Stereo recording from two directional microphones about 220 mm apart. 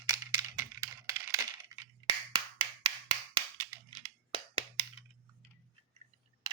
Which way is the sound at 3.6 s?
25° right (ahead or behind).